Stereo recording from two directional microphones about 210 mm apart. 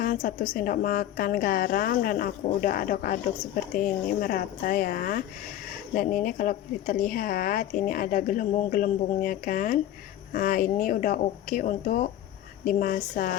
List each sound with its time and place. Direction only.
0.0 s a woman's voice: 40° left (ahead or behind)